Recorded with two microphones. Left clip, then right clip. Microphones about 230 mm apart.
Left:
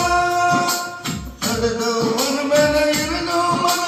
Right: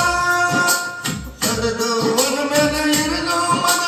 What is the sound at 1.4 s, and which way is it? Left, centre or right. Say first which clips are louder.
Music: even; right.